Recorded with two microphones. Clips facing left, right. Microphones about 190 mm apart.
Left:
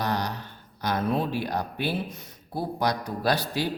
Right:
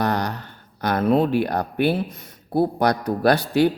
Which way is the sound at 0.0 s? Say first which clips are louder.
Right 5 dB; 55° right (ahead or behind).